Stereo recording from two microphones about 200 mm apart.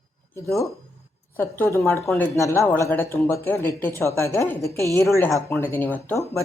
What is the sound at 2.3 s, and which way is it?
Speech, 15° left (ahead or behind).